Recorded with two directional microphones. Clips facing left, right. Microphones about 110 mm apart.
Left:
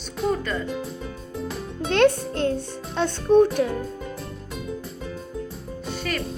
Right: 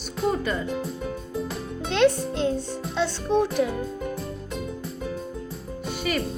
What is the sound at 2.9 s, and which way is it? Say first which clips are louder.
Speech: left 6 dB; 50° left (ahead or behind).